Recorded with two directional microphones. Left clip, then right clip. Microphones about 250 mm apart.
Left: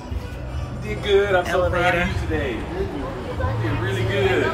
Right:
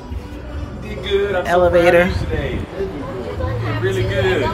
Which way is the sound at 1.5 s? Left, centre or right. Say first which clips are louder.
Right 7 dB; right.